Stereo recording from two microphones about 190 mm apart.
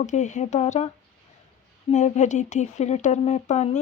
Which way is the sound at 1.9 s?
40° left (ahead or behind).